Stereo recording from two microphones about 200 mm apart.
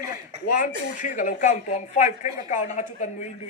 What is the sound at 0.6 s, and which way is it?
A woman's voice, 40° left (ahead or behind).